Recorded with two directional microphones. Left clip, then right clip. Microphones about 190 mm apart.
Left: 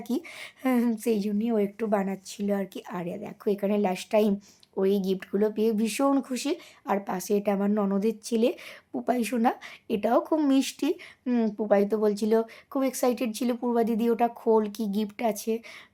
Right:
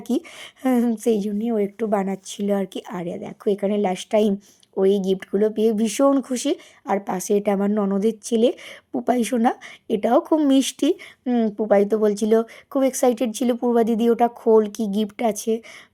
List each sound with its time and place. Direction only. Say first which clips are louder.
0.1 s a woman's voice: right 7 dB; 25° right (ahead or behind)
1.4 s a woman's voice: right 4 dB; 15° right (ahead or behind)
11.3 s a woman's voice: right 5 dB; 20° right (ahead or behind)